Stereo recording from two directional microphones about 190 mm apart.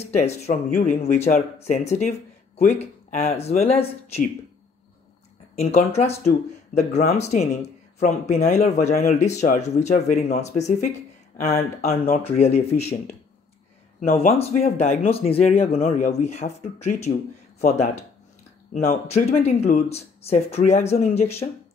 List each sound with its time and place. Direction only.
0.0 s speech: 35° left (ahead or behind)
5.6 s speech: 35° left (ahead or behind)
14.4 s speech: 35° left (ahead or behind)
18.7 s speech: 50° left (ahead or behind)
19.0 s speech: 35° left (ahead or behind)